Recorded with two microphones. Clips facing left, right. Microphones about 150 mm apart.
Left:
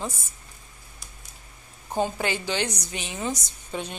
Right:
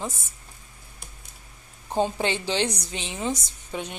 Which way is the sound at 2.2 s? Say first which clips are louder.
Right 2 dB; 25° right (ahead or behind).